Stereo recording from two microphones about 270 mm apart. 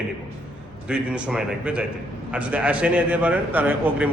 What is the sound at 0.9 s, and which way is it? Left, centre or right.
A man's voice, centre.